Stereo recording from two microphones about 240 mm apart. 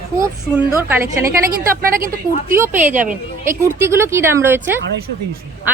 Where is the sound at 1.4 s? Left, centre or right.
Right.